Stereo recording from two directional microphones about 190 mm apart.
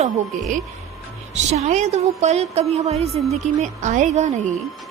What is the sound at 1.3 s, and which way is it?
A woman's voice, 35° right (ahead or behind).